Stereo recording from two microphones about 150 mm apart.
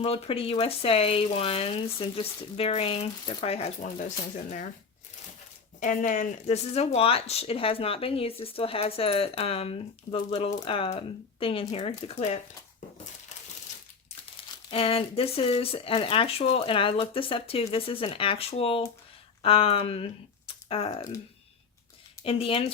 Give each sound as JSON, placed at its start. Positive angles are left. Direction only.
{"t": 0.0, "sound": "speech", "side_deg": 40}
{"t": 5.8, "sound": "speech", "side_deg": 60}
{"t": 14.7, "sound": "speech", "side_deg": 40}
{"t": 20.5, "sound": "typing", "side_deg": 40}
{"t": 22.2, "sound": "speech", "side_deg": 40}